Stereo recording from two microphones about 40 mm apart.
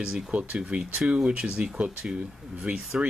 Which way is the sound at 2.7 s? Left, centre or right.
Right.